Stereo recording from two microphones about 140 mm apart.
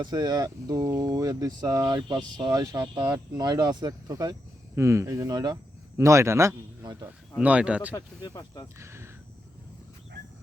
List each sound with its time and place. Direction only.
0.0 s speech: 30° right (ahead or behind)
7.3 s speech: 10° right (ahead or behind)
7.9 s speech: 25° left (ahead or behind)
8.8 s speech: 20° right (ahead or behind)